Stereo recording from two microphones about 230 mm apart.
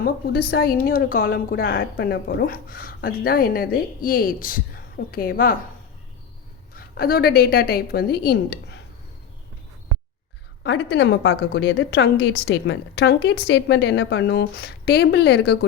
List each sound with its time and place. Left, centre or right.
0.0 s a woman's voice: left
6.7 s a woman's voice: left
10.6 s a woman's voice: left